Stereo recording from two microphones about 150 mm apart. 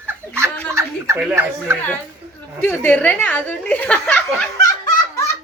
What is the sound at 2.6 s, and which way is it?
Speech, 10° left (ahead or behind).